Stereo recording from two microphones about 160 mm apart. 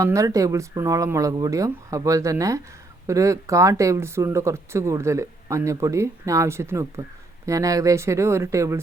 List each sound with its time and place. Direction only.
0.0 s speech: 20° right (ahead or behind)